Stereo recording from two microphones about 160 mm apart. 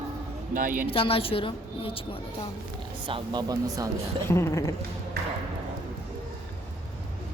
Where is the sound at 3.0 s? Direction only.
30° right (ahead or behind).